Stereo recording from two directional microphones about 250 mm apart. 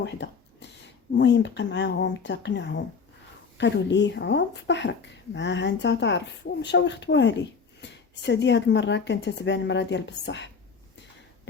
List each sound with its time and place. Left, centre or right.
0.0 s speech: left